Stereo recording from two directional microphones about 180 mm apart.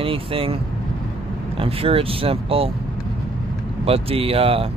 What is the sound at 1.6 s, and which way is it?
Speech, 30° right (ahead or behind).